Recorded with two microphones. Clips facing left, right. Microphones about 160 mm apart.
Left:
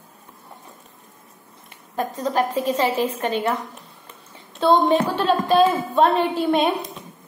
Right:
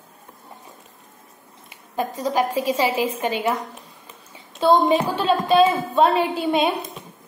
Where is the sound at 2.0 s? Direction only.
10° right (ahead or behind).